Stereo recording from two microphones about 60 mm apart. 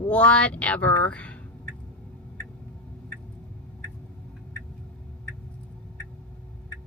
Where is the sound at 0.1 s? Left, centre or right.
Left.